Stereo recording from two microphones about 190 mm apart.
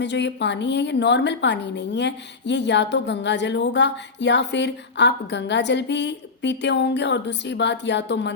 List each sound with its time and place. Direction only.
0.0 s a woman's voice: 65° left (ahead or behind)